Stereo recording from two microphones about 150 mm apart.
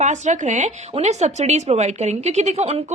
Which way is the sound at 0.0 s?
50° right (ahead or behind).